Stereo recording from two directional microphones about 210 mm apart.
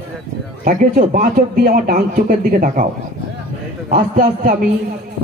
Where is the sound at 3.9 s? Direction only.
40° right (ahead or behind).